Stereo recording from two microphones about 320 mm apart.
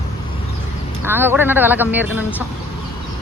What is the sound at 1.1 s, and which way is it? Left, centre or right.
Speech, centre.